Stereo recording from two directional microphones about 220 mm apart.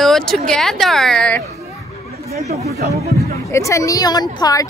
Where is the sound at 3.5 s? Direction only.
15° left (ahead or behind).